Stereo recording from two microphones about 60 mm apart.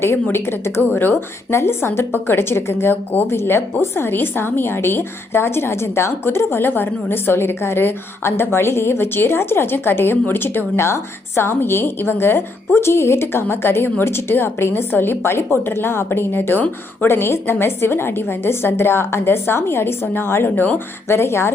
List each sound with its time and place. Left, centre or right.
0.0 s a woman's voice: left
2.9 s a woman's voice: left